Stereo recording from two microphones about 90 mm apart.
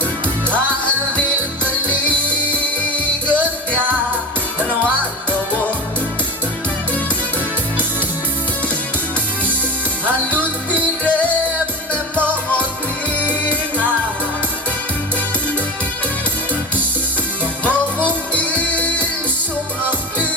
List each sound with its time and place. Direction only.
2.9 s music: 15° left (ahead or behind)
10.3 s music: 15° left (ahead or behind)
17.7 s music: 15° left (ahead or behind)